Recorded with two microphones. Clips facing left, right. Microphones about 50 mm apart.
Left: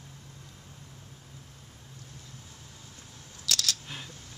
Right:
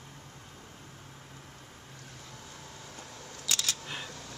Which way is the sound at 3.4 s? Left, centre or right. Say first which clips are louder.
Left 2 dB; centre.